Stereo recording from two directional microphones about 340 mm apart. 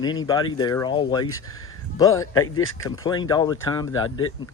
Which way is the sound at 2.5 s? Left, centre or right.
Left.